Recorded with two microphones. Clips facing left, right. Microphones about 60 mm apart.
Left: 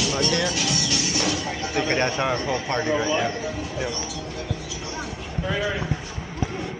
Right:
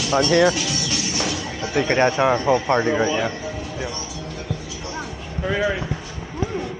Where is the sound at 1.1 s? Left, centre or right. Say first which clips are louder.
Even; centre.